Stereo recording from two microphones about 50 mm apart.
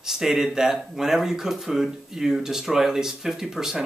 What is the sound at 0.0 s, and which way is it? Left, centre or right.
A man's voice, centre.